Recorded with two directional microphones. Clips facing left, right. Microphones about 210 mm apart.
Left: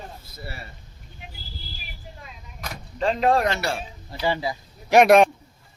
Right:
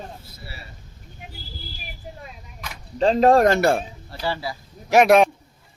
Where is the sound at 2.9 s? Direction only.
35° right (ahead or behind); by 3.8 s 50° right (ahead or behind).